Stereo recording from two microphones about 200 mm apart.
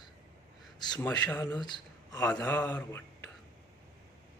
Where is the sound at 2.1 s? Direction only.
5° left (ahead or behind).